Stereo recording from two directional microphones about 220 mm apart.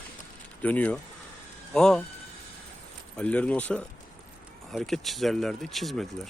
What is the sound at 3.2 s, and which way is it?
Speech, 5° left (ahead or behind).